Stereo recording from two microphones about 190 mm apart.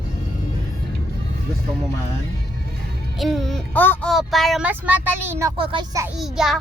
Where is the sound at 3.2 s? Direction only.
Centre (ahead or behind).